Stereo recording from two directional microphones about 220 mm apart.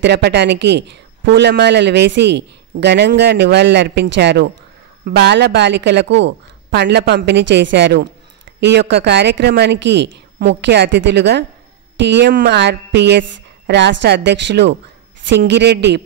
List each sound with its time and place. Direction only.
0.0 s a woman's voice: 50° right (ahead or behind)